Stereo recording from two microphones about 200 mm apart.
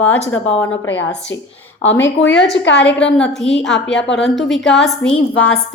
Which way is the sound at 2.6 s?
65° left (ahead or behind).